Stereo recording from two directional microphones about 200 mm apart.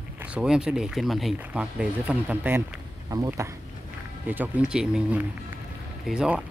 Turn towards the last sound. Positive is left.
turn(degrees=-5)  # may be behind; listen again after turning